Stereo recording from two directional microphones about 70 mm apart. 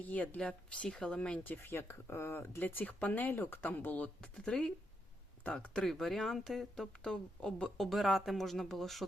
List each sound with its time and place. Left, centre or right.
0.0 s speech: left
1.5 s speech: left
4.2 s speech: centre
7.9 s speech: centre